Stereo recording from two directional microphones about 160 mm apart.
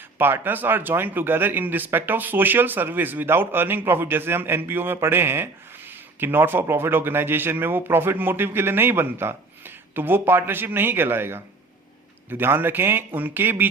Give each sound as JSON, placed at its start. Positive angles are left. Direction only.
{"t": 0.2, "sound": "speech", "side_deg": -15}